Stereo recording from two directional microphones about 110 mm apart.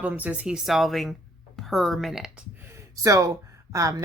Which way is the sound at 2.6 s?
25° right (ahead or behind).